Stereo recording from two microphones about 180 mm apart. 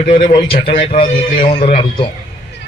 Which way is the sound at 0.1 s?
35° left (ahead or behind).